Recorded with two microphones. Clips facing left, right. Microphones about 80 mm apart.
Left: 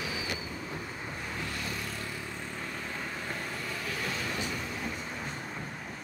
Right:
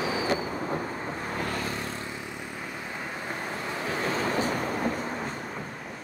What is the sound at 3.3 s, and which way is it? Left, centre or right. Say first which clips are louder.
Vehicle: right 5 dB; right.